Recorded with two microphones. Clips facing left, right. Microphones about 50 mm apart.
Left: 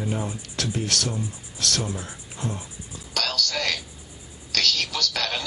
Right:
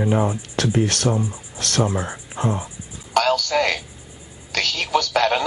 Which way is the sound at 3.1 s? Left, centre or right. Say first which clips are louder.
Right 9 dB; right.